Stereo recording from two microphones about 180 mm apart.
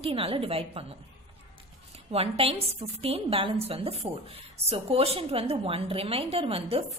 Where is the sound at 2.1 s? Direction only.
30° right (ahead or behind).